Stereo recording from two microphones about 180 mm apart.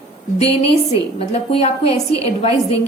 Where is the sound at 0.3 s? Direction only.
35° left (ahead or behind).